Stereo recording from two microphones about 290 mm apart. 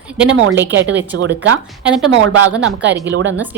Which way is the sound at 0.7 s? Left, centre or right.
Right.